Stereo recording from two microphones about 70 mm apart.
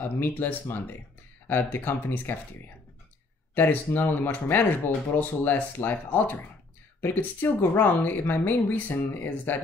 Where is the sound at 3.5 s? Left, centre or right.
Left.